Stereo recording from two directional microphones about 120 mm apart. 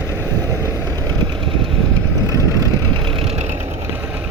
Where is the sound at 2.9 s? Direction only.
45° right (ahead or behind).